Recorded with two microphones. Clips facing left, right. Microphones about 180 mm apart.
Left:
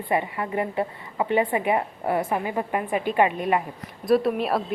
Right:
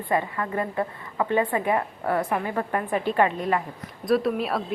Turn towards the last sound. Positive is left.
turn(degrees=0)  # may be behind; listen again after turning